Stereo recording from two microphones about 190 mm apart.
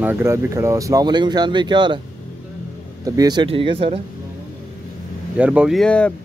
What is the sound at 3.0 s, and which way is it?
Speech, 20° right (ahead or behind).